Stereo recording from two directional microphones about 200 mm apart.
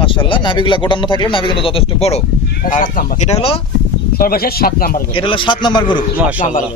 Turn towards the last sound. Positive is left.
turn(degrees=40)  # may be behind; listen again after turning